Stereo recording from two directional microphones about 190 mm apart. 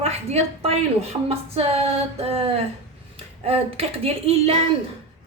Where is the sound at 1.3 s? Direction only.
30° right (ahead or behind).